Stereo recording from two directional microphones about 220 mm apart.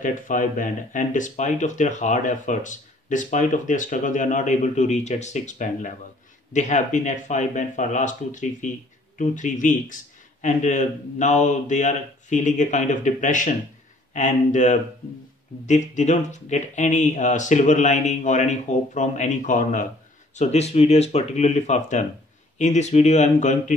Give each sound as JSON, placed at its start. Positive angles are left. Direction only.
{"t": 0.0, "sound": "speech", "side_deg": 35}